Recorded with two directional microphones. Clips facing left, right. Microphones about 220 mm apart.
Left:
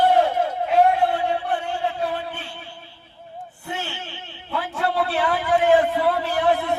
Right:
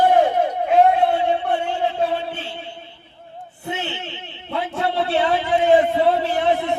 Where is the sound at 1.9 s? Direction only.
25° right (ahead or behind).